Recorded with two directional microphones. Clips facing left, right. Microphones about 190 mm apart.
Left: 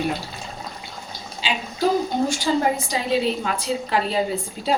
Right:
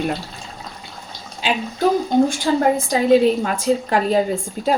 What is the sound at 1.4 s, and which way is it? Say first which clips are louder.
Speech: right 5 dB; 55° right (ahead or behind).